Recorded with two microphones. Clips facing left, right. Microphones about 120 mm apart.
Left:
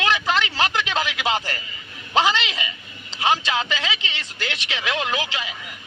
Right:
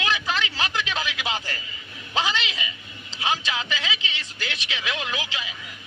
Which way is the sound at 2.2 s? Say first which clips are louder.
Left 6 dB; 65° left (ahead or behind).